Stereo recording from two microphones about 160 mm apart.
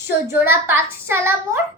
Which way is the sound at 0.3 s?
15° right (ahead or behind).